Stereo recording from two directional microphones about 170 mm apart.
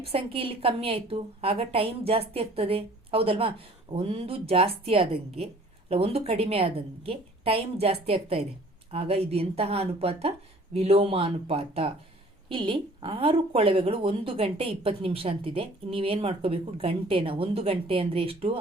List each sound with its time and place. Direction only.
0.0 s a woman's voice: 35° right (ahead or behind)